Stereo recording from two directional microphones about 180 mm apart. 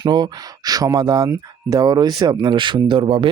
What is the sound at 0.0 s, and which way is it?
Speech, 25° right (ahead or behind).